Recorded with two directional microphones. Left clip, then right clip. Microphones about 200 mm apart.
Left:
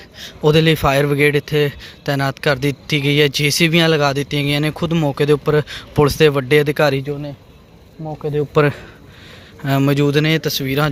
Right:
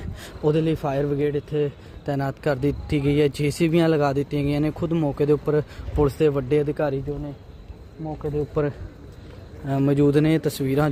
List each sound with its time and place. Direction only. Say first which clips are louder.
0.4 s a man's voice: left 9 dB; 10° left (ahead or behind)
8.0 s speech: left 6 dB; 30° left (ahead or behind)
9.6 s a man's voice: left 4 dB; 5° left (ahead or behind)